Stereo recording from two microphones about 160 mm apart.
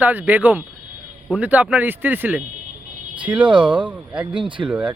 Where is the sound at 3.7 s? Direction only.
10° right (ahead or behind).